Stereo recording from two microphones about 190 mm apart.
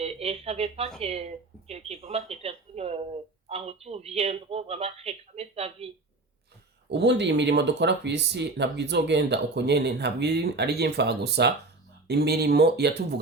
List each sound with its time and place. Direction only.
0.0 s speech: 30° right (ahead or behind)
6.8 s speech: 65° right (ahead or behind)